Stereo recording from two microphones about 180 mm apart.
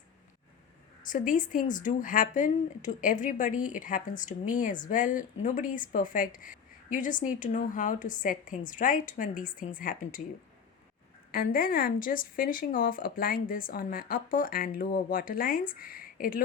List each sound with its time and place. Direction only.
1.0 s speech: 45° left (ahead or behind)
11.3 s speech: 55° left (ahead or behind)